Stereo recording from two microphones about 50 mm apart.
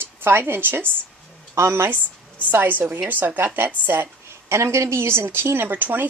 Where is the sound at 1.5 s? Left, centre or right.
Right.